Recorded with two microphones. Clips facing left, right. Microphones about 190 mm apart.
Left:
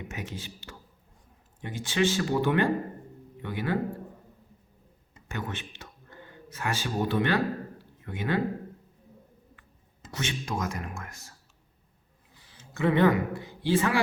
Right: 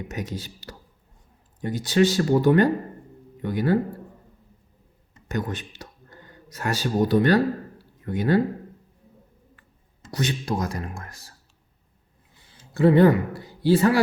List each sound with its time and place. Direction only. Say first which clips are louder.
0.1 s speech: right 6 dB; 40° right (ahead or behind)
5.3 s speech: right 7 dB; 40° right (ahead or behind)
10.1 s speech: right 6 dB; 35° right (ahead or behind)
12.5 s speech: right 7 dB; 35° right (ahead or behind)